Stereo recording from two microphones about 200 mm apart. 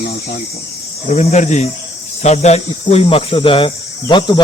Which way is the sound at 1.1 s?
35° left (ahead or behind).